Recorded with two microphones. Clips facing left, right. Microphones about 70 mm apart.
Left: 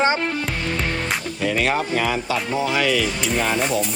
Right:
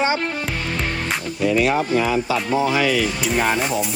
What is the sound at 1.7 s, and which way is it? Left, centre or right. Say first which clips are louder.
Speech: right 3 dB; centre.